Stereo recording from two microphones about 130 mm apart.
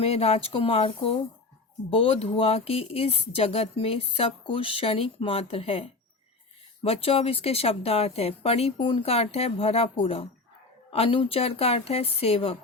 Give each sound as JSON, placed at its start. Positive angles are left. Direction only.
{"t": 0.0, "sound": "speech", "side_deg": 50}